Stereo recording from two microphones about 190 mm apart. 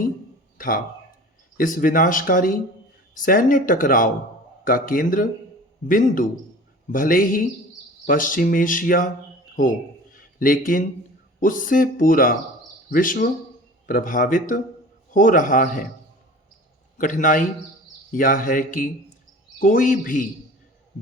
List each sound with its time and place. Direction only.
0.6 s speech: 45° left (ahead or behind)
10.4 s speech: 45° left (ahead or behind)
17.0 s speech: 45° left (ahead or behind)